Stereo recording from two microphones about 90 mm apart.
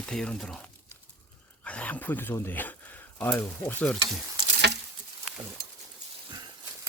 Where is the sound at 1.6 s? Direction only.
15° left (ahead or behind).